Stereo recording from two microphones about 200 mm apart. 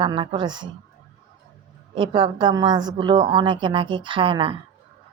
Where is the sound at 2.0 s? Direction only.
25° right (ahead or behind).